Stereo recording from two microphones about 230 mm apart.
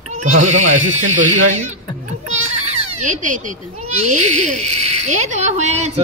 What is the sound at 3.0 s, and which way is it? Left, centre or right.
A child's voice, right.